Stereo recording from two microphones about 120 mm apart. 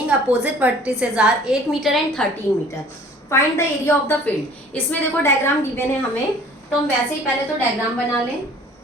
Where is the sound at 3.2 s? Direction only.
25° left (ahead or behind).